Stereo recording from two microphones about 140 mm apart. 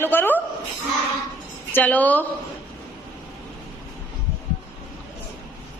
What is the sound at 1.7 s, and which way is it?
Speech, 10° left (ahead or behind).